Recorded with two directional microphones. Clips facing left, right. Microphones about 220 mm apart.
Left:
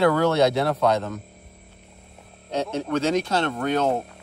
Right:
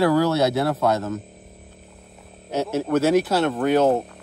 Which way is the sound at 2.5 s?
5° right (ahead or behind).